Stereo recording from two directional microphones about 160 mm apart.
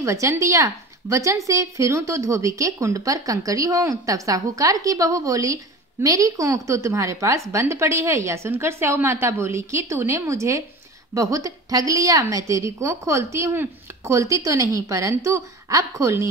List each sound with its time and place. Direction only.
0.0 s a woman's voice: 20° right (ahead or behind)